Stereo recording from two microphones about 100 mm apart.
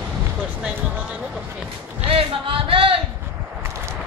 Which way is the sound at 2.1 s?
65° right (ahead or behind).